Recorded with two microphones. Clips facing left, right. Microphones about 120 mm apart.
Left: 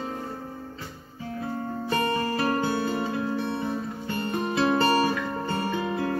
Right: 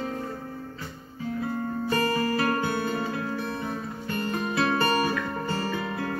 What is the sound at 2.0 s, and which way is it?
Music, 25° left (ahead or behind).